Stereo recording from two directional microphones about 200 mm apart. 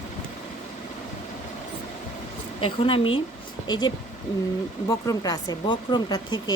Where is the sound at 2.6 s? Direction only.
25° left (ahead or behind).